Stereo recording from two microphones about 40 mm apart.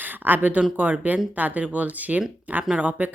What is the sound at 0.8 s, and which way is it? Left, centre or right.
Speech, right.